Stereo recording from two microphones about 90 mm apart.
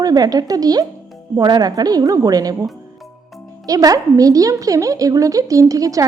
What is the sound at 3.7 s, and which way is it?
A woman's voice, 40° right (ahead or behind).